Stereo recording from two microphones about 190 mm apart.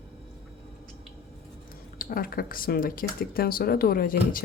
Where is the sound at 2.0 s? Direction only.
50° left (ahead or behind).